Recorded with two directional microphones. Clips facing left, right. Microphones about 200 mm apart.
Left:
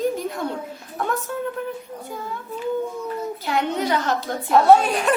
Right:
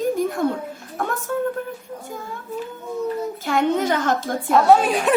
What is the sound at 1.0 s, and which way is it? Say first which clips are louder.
Speech: even; 50° right (ahead or behind).